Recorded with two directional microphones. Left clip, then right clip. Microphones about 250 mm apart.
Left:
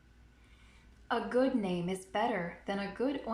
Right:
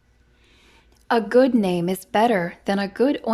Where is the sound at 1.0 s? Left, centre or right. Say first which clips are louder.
Right 13 dB; right.